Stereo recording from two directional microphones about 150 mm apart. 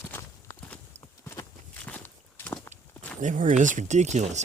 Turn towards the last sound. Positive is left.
turn(degrees=-50)  # may be behind; listen again after turning